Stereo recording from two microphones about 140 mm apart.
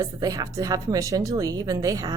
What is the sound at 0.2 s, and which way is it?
A woman's voice, 25° right (ahead or behind).